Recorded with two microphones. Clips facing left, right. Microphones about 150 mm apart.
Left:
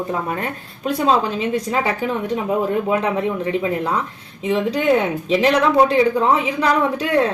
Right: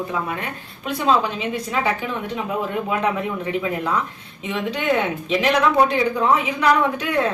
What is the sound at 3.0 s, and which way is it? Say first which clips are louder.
A woman's voice: left 2 dB; 30° left (ahead or behind).